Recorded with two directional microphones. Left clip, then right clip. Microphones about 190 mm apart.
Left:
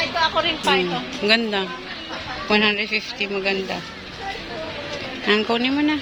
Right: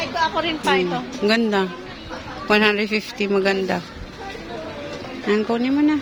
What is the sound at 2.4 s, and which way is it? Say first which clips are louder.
A man's voice: right 2 dB; 50° right (ahead or behind).